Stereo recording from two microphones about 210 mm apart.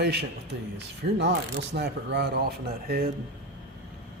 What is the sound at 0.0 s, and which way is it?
Speech, 55° right (ahead or behind).